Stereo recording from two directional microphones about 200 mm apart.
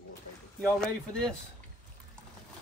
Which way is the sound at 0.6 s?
5° left (ahead or behind).